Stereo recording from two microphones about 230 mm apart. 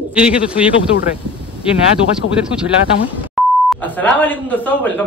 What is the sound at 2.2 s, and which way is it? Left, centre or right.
Speech, left.